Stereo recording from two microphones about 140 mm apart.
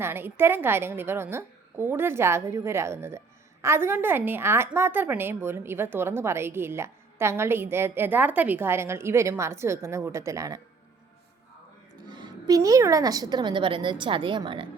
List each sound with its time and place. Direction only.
0.0 s a woman's voice: 15° right (ahead or behind)
12.0 s a woman's voice: 30° right (ahead or behind)